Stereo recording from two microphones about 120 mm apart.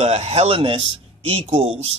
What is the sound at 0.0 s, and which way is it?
Speech, 60° right (ahead or behind).